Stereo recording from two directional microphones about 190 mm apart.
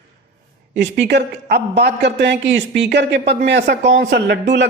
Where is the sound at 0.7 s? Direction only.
65° right (ahead or behind).